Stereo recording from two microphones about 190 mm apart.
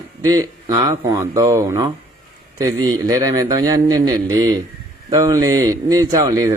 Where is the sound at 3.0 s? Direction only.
20° right (ahead or behind).